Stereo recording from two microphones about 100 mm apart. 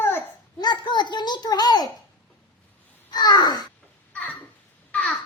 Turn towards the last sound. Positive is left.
turn(degrees=5)  # may be behind; listen again after turning